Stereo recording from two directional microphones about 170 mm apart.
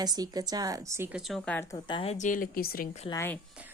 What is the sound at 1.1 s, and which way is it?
Speech, centre (ahead or behind).